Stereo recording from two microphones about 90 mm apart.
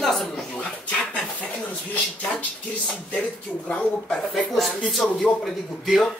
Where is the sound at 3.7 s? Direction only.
10° left (ahead or behind).